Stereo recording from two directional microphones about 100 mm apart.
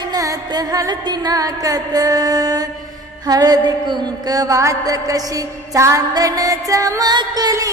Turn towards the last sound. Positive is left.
turn(degrees=-40)  # may be behind; listen again after turning